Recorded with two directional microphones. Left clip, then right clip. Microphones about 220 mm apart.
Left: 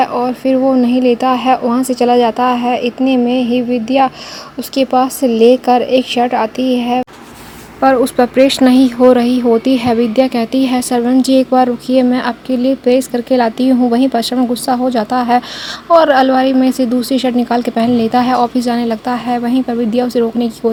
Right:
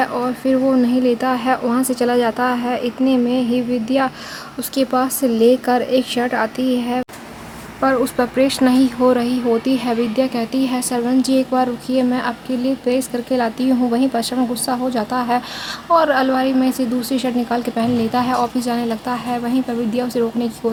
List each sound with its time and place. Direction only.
0.0 s speech: 20° left (ahead or behind)